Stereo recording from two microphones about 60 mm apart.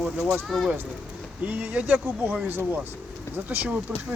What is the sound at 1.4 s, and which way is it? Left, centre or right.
Speech, right.